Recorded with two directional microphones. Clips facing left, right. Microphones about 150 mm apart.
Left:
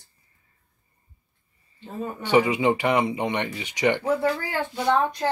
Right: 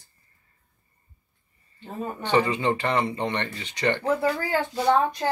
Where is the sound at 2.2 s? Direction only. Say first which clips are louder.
Left 3 dB; 10° left (ahead or behind).